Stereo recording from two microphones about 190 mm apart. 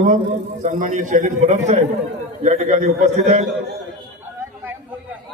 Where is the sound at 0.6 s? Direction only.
40° right (ahead or behind).